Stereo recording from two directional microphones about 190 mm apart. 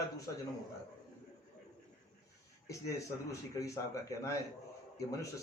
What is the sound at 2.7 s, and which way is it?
A man's voice, 15° left (ahead or behind).